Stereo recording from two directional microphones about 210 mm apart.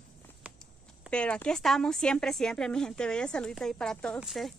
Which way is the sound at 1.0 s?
5° left (ahead or behind).